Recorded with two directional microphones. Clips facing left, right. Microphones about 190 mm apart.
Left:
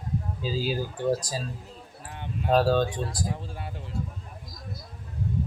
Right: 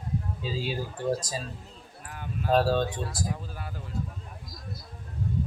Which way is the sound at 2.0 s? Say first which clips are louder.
Left 1 dB; 25° left (ahead or behind).